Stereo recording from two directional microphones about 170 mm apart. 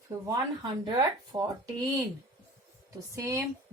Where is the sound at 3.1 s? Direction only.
20° right (ahead or behind).